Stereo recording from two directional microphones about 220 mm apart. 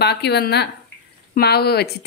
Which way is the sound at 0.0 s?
50° left (ahead or behind).